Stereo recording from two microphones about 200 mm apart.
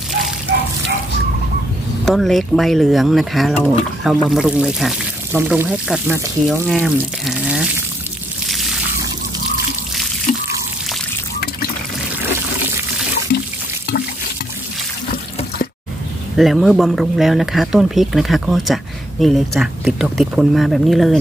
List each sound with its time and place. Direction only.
0.5 s a sound: 65° right (ahead or behind)
2.0 s speech: centre (ahead or behind)
8.5 s a sound: centre (ahead or behind)
10.3 s pour: 40° left (ahead or behind)
13.3 s water: 55° left (ahead or behind)
16.3 s speech: centre (ahead or behind)